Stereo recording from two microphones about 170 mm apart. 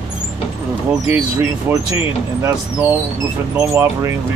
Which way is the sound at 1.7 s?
10° right (ahead or behind).